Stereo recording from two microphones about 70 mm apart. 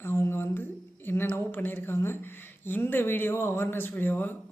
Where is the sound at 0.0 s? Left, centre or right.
Left.